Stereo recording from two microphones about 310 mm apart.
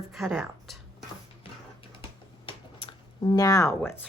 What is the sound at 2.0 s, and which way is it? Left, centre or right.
Typing, centre.